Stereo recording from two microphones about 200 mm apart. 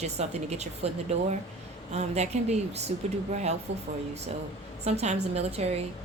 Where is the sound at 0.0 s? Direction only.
35° right (ahead or behind).